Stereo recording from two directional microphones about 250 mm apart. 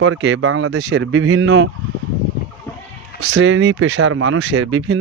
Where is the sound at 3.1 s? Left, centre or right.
Right.